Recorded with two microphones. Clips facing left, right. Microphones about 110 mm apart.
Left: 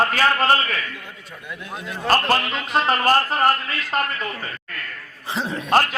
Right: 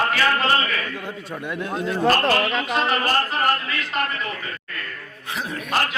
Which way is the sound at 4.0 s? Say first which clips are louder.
Left 2 dB; 45° left (ahead or behind).